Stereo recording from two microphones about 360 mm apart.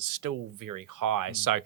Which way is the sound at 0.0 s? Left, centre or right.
Right.